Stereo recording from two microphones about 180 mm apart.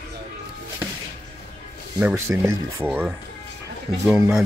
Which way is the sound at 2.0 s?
15° right (ahead or behind).